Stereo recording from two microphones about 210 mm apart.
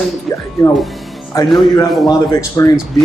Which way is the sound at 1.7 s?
15° left (ahead or behind).